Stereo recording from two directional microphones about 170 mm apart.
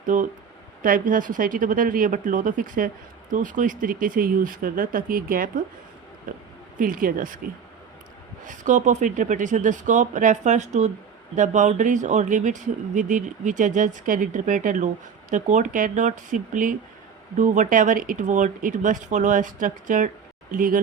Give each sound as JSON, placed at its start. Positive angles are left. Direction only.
{"t": 0.1, "sound": "speech", "side_deg": -50}
{"t": 6.7, "sound": "speech", "side_deg": -55}
{"t": 8.4, "sound": "speech", "side_deg": -45}